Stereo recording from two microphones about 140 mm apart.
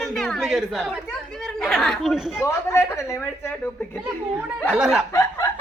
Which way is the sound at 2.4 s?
20° left (ahead or behind).